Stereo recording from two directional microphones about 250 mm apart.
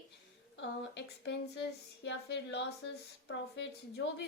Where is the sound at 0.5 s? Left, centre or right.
Left.